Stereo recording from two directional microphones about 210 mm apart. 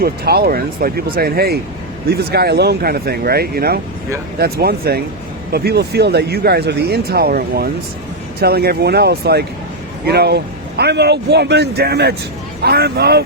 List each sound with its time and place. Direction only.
0.0 s speech: 50° right (ahead or behind)